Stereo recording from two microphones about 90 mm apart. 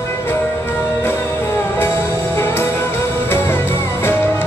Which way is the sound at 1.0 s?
25° left (ahead or behind).